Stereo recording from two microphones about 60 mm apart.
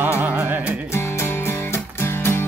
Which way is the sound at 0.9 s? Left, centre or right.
Left.